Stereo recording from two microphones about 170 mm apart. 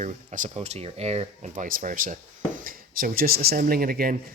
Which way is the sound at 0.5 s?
40° right (ahead or behind).